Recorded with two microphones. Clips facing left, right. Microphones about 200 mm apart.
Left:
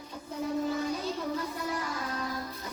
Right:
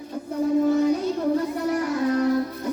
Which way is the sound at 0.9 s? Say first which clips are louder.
Right 11 dB; 65° right (ahead or behind).